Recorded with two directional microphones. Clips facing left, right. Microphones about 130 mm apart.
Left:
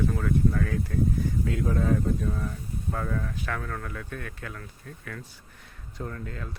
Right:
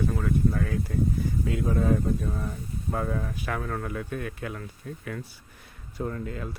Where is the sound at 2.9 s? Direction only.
20° right (ahead or behind).